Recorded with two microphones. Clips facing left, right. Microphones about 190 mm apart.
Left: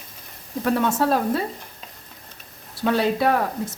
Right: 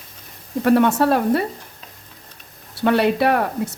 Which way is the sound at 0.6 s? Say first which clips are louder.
Right 5 dB; 65° right (ahead or behind).